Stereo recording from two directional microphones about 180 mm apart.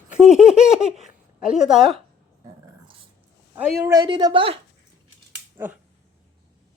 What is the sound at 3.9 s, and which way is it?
Speech, 25° right (ahead or behind).